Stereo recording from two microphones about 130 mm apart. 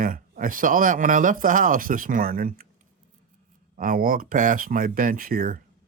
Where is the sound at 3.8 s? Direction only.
90° right.